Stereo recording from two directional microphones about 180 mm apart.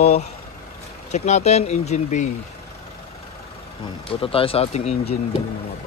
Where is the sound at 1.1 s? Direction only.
40° left (ahead or behind).